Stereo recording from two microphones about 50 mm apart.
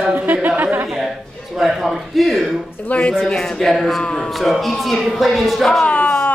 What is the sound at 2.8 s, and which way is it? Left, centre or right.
Speech, left.